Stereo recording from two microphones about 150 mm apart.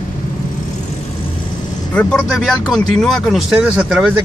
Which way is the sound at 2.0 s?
5° left (ahead or behind).